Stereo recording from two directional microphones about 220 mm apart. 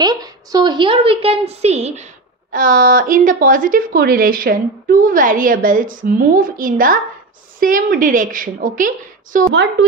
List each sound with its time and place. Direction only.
0.0 s a woman's voice: 15° right (ahead or behind); by 9.5 s 35° right (ahead or behind)
9.5 s a woman's voice: 55° right (ahead or behind)